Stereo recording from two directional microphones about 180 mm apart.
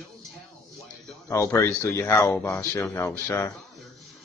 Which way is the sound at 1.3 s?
15° left (ahead or behind).